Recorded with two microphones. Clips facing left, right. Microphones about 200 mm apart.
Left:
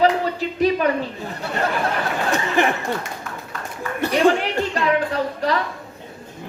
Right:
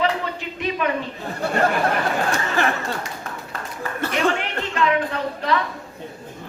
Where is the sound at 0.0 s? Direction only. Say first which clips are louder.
Left 5 dB; 35° left (ahead or behind).